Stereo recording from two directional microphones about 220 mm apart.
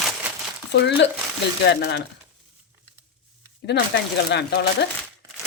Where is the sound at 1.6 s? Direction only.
50° left (ahead or behind).